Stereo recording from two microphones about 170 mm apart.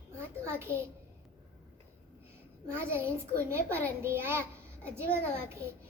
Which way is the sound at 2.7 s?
15° right (ahead or behind).